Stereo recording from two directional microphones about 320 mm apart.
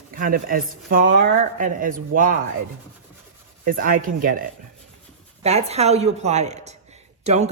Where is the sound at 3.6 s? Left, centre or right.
Right.